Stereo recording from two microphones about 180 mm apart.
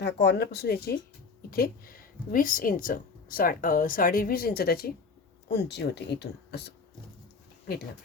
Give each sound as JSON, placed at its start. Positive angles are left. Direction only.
{"t": 0.0, "sound": "speech", "side_deg": 70}
{"t": 5.5, "sound": "speech", "side_deg": 70}